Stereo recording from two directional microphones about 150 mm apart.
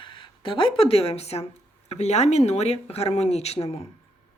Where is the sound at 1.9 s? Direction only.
45° left (ahead or behind).